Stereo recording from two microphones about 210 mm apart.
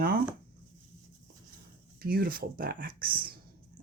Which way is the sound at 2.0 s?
45° right (ahead or behind).